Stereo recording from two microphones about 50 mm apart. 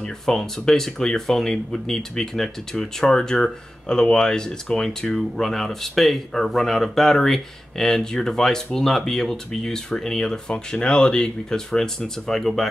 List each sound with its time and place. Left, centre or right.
0.0 s speech: centre